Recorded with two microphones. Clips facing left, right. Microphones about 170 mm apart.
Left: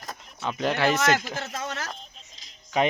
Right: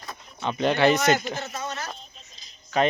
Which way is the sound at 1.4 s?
90° left.